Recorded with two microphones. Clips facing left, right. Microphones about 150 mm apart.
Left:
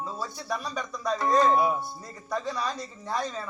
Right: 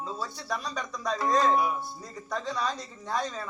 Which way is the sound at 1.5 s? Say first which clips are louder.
Left 3 dB; 25° left (ahead or behind).